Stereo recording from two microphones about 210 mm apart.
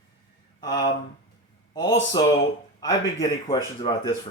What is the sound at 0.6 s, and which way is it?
Speech, 20° left (ahead or behind).